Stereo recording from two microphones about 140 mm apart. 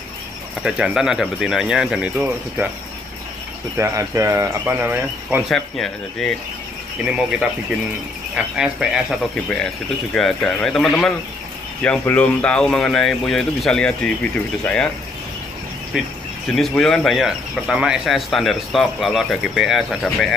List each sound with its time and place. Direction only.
0.6 s speech: 5° right (ahead or behind)
3.7 s speech: 20° right (ahead or behind)
5.5 s speech: 5° left (ahead or behind)
8.5 s speech: 5° right (ahead or behind)
16.4 s speech: centre (ahead or behind)